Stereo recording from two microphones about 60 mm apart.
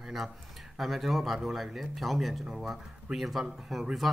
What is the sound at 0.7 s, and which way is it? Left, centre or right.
Speech, centre.